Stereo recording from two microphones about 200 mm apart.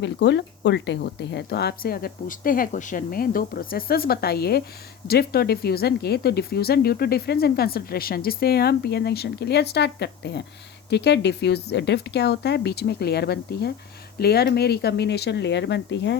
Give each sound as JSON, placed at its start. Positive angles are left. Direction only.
{"t": 0.0, "sound": "speech", "side_deg": 60}